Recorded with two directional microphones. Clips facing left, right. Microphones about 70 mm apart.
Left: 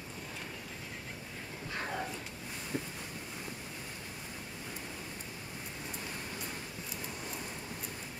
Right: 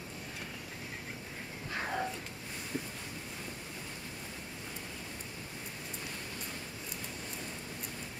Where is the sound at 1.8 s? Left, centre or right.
Centre.